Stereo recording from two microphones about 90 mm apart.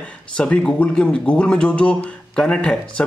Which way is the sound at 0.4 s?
10° left (ahead or behind).